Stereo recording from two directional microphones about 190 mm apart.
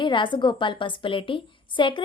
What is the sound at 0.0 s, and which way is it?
A woman's voice, 25° left (ahead or behind).